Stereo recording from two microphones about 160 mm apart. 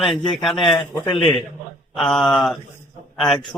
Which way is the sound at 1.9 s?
Centre (ahead or behind).